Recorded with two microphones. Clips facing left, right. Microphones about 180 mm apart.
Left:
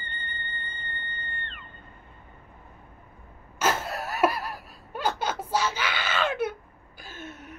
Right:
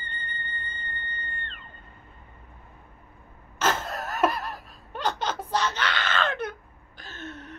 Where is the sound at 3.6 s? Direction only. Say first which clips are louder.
Even; 10° left (ahead or behind).